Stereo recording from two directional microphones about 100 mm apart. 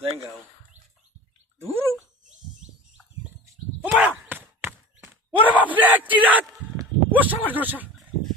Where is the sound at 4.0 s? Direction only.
15° right (ahead or behind).